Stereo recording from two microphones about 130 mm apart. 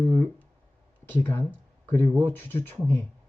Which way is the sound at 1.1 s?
15° left (ahead or behind).